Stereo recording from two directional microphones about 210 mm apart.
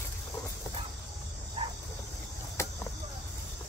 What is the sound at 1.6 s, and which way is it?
Dog, 25° right (ahead or behind).